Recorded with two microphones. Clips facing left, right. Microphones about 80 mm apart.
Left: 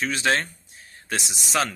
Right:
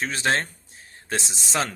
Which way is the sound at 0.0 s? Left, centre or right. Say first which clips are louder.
Left 1 dB; right.